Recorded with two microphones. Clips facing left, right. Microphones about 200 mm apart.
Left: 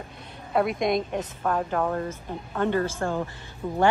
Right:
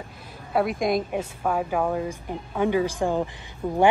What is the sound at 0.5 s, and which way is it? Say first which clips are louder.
A woman's voice: even; centre (ahead or behind).